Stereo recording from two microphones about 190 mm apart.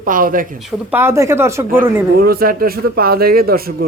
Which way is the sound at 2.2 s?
50° right (ahead or behind).